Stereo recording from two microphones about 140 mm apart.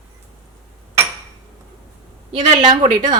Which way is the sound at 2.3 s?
50° right (ahead or behind).